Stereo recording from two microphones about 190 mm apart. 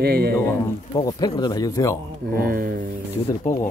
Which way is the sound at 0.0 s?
55° right (ahead or behind).